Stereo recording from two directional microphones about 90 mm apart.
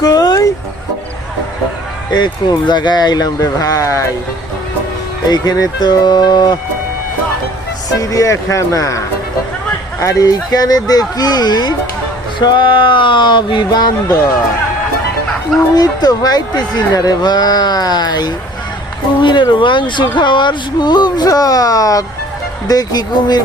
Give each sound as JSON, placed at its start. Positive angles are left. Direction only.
{"t": 0.0, "sound": "vehicle", "side_deg": 45}
{"t": 2.0, "sound": "speech", "side_deg": 50}
{"t": 5.3, "sound": "speech", "side_deg": 50}
{"t": 7.9, "sound": "speech", "side_deg": 40}
{"t": 15.7, "sound": "speech", "side_deg": 45}